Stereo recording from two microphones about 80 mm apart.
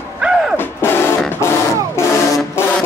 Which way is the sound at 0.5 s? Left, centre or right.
Left.